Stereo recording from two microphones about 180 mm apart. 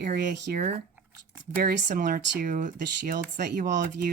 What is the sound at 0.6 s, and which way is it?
Speech, 35° right (ahead or behind).